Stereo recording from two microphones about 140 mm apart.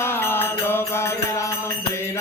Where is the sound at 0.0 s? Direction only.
15° left (ahead or behind).